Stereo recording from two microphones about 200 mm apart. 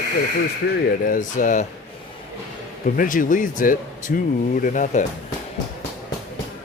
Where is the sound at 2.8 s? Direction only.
45° left (ahead or behind).